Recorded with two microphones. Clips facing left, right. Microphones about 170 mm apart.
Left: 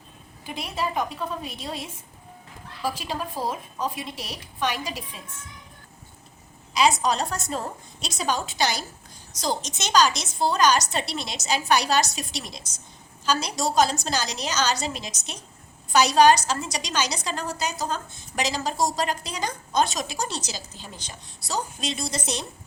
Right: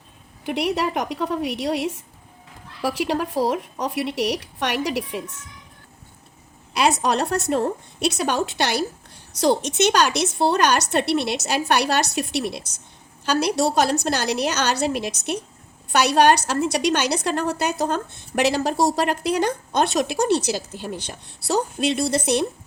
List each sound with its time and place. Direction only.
0.4 s speech: 70° right (ahead or behind)
6.7 s a woman's voice: 60° right (ahead or behind)